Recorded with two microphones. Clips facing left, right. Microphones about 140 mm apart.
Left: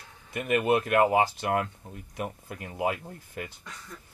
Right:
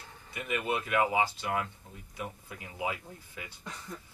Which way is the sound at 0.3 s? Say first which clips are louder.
Left 8 dB; 55° left (ahead or behind).